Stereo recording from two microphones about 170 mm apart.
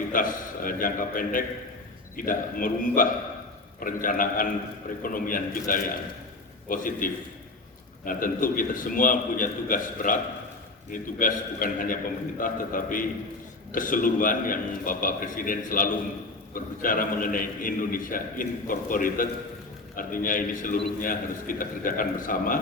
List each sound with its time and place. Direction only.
0.1 s a man's voice: 55° left (ahead or behind)